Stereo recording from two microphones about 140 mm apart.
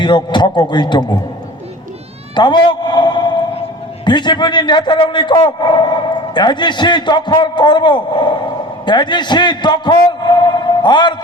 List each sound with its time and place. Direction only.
0.0 s a man's voice: 35° left (ahead or behind)
2.3 s a man's voice: 30° left (ahead or behind)